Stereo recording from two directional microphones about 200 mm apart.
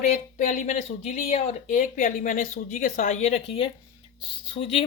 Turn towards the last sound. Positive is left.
turn(degrees=30)  # may be behind; listen again after turning